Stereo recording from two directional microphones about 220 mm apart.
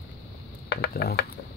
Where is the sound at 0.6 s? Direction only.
45° left (ahead or behind).